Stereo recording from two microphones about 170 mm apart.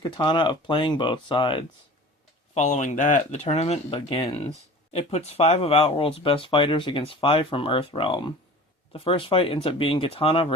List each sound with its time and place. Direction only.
0.0 s speech: 30° left (ahead or behind)
2.6 s speech: 45° left (ahead or behind)